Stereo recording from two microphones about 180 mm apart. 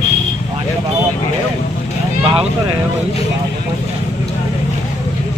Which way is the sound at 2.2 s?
30° right (ahead or behind).